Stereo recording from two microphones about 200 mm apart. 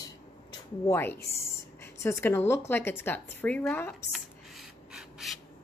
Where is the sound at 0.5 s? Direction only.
15° left (ahead or behind).